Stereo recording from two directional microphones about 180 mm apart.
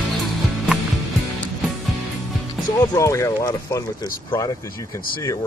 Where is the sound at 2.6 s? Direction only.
20° left (ahead or behind).